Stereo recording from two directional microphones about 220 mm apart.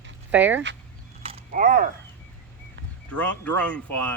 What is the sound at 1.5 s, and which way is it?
Speech, 40° right (ahead or behind).